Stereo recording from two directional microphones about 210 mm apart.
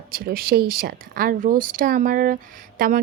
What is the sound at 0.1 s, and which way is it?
A woman's voice, 45° right (ahead or behind).